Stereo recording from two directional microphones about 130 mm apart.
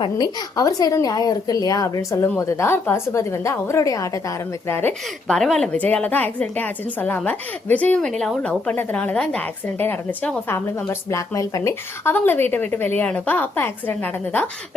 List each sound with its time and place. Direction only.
0.0 s a woman's voice: 30° left (ahead or behind)
4.7 s a woman's voice: 15° left (ahead or behind)
5.4 s a woman's voice: 5° left (ahead or behind)
10.5 s a woman's voice: 20° left (ahead or behind)